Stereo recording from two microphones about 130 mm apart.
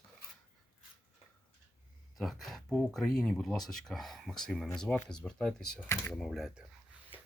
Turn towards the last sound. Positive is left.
turn(degrees=0)  # may be behind; listen again after turning